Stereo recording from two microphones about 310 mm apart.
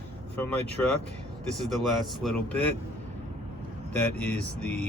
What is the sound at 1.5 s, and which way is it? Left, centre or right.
Speech, centre.